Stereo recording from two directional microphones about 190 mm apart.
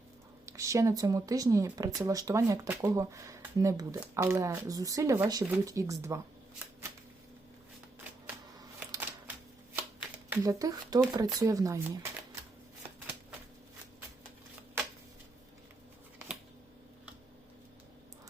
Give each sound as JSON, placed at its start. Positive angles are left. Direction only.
{"t": 0.4, "sound": "speech", "side_deg": -15}
{"t": 8.9, "sound": "a sound", "side_deg": -10}
{"t": 10.2, "sound": "speech", "side_deg": -15}